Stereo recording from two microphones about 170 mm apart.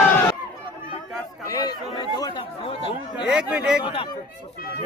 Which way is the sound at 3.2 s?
5° right (ahead or behind).